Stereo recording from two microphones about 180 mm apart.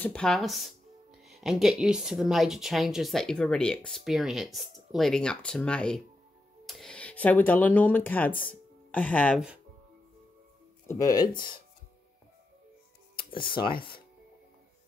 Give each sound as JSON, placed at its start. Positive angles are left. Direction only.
{"t": 0.0, "sound": "speech", "side_deg": 5}
{"t": 10.9, "sound": "speech", "side_deg": 20}
{"t": 13.3, "sound": "speech", "side_deg": 25}
{"t": 13.7, "sound": "speech", "side_deg": 55}